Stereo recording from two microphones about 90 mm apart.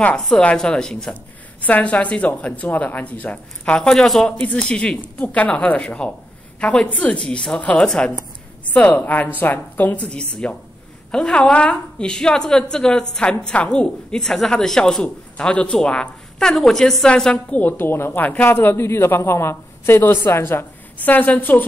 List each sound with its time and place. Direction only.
0.2 s a woman's voice: 10° left (ahead or behind)